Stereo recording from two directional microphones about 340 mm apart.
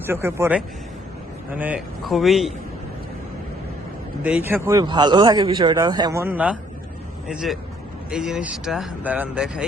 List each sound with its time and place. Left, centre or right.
0.0 s speech: centre
4.2 s speech: centre